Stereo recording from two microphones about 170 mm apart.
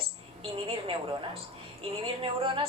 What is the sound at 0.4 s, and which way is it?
Speech, 35° right (ahead or behind).